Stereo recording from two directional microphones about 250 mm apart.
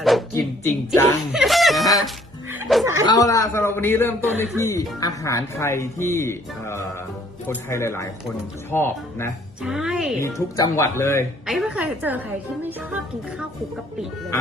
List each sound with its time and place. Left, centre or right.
0.0 s music: centre
0.9 s speech: centre
3.1 s speech: centre
9.6 s speech: centre
10.2 s speech: centre
11.4 s speech: centre